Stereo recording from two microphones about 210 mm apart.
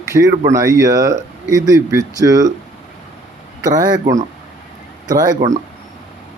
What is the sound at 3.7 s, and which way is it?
Speech, 20° right (ahead or behind).